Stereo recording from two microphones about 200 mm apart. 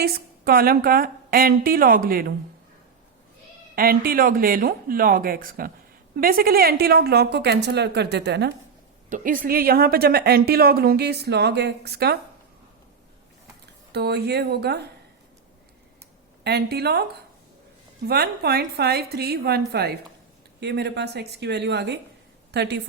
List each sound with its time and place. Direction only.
0.0 s a woman's voice: 50° right (ahead or behind)
3.8 s a woman's voice: 45° right (ahead or behind)
9.0 s a woman's voice: 40° right (ahead or behind)
13.9 s a woman's voice: 55° right (ahead or behind)
16.4 s a woman's voice: 55° right (ahead or behind)